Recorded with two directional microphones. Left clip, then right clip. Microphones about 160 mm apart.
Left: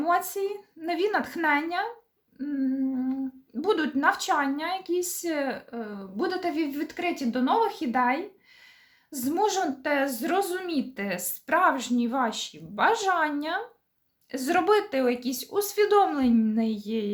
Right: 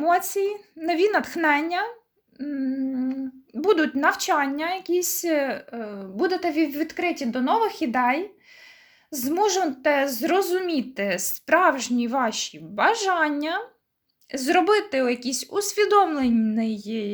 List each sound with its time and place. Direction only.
0.0 s speech: 25° right (ahead or behind); by 17.1 s 10° right (ahead or behind)